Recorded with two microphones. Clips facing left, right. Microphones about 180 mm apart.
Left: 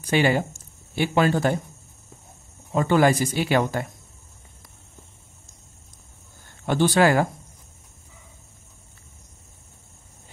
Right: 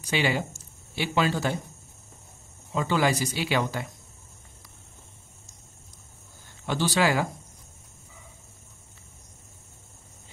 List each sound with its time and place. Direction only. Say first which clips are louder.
0.0 s speech: left 6 dB; 50° left (ahead or behind)
2.7 s speech: left 6 dB; 50° left (ahead or behind)
6.6 s speech: left 6 dB; 50° left (ahead or behind)